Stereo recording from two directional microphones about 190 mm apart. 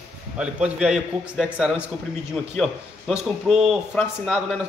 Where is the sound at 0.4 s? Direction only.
5° right (ahead or behind).